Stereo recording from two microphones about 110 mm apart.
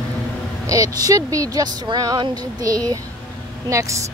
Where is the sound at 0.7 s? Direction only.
30° right (ahead or behind).